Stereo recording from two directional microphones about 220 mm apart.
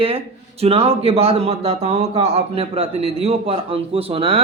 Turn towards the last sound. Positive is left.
turn(degrees=-25)  # may be behind; listen again after turning